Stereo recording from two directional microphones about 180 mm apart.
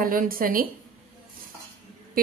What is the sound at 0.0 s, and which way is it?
Speech, 50° right (ahead or behind).